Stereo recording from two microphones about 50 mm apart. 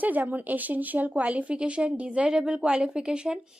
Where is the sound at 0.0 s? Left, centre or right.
Right.